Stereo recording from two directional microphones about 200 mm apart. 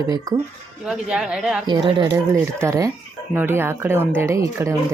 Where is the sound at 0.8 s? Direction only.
5° right (ahead or behind).